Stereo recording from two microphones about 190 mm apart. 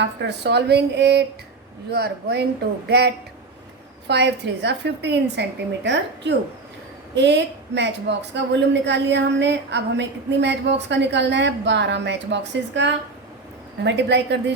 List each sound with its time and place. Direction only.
0.0 s a woman's voice: 65° right (ahead or behind)